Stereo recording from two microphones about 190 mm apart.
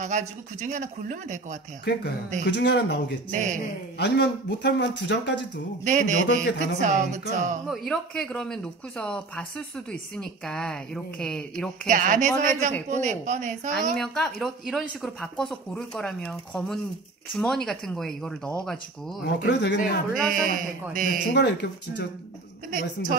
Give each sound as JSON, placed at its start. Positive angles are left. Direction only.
{"t": 0.0, "sound": "speech", "side_deg": -40}
{"t": 1.9, "sound": "speech", "side_deg": 65}
{"t": 3.3, "sound": "speech", "side_deg": -40}
{"t": 4.0, "sound": "speech", "side_deg": 60}
{"t": 5.9, "sound": "speech", "side_deg": -40}
{"t": 7.9, "sound": "speech", "side_deg": 5}
{"t": 11.9, "sound": "speech", "side_deg": -40}
{"t": 13.9, "sound": "speech", "side_deg": 5}
{"t": 19.2, "sound": "speech", "side_deg": 65}
{"t": 20.2, "sound": "a woman's voice", "side_deg": -45}
{"t": 21.3, "sound": "speech", "side_deg": 65}
{"t": 22.7, "sound": "a woman's voice", "side_deg": -45}